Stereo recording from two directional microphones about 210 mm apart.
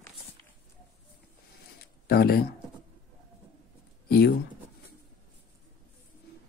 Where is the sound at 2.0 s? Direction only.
45° left (ahead or behind).